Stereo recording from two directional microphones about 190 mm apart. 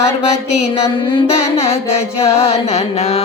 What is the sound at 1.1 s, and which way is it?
Music, 35° left (ahead or behind).